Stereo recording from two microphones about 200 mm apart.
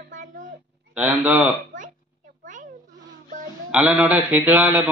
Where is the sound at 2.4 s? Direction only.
40° right (ahead or behind).